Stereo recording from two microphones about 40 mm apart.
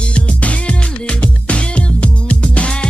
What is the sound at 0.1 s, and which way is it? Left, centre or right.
Music, left.